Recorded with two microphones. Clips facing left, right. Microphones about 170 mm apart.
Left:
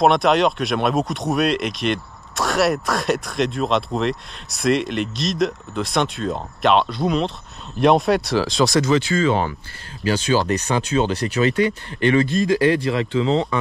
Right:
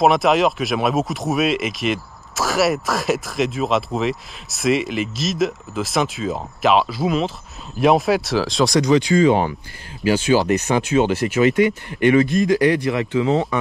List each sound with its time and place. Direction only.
0.0 s speech: centre (ahead or behind)
8.9 s speech: 15° right (ahead or behind)
11.0 s speech: 15° right (ahead or behind)